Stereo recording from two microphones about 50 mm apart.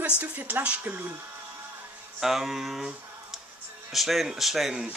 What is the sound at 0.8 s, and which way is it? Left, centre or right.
Speech, right.